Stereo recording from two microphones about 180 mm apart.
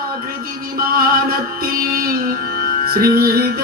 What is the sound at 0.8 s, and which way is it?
Speech, 55° right (ahead or behind).